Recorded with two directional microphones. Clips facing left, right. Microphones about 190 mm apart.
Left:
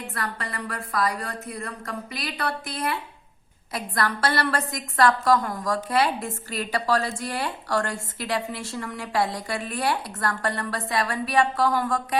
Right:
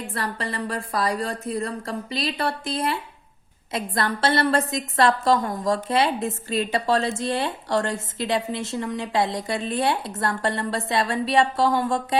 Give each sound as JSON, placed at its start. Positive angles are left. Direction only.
{"t": 0.1, "sound": "a woman's voice", "side_deg": -30}